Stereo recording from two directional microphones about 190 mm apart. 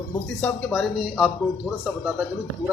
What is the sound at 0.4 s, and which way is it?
Speech, centre (ahead or behind).